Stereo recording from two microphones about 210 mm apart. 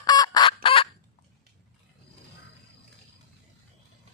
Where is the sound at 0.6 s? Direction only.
25° left (ahead or behind).